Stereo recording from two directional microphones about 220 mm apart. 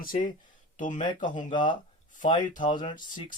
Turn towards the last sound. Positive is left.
turn(degrees=20)  # may be behind; listen again after turning